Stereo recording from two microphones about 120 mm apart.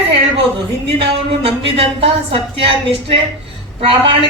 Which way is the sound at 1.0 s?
55° right (ahead or behind).